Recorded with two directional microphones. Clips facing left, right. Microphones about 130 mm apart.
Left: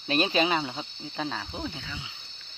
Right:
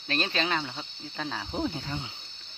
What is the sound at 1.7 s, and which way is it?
Speech, 40° right (ahead or behind).